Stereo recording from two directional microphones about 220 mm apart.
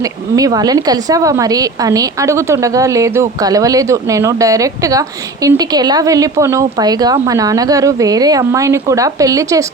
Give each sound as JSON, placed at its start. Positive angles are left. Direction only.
{"t": 0.3, "sound": "a woman's voice", "side_deg": -15}